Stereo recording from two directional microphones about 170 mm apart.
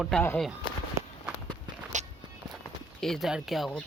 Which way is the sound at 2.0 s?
45° right (ahead or behind).